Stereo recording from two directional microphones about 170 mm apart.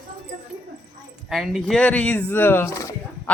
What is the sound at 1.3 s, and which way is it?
Speech, centre (ahead or behind).